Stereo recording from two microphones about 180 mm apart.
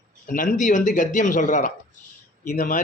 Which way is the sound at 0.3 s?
45° left (ahead or behind).